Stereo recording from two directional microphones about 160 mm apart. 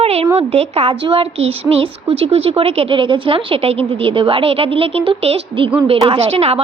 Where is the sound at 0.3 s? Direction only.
40° right (ahead or behind).